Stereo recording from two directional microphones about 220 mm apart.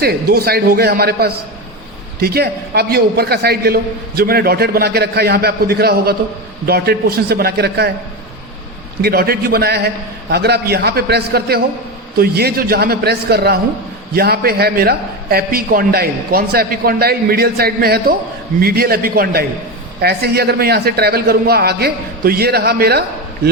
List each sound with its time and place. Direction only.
0.0 s a man's voice: 45° right (ahead or behind)
9.0 s a man's voice: 45° right (ahead or behind)